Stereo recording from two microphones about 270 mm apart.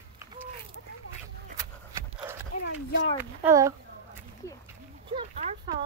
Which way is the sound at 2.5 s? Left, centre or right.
Left.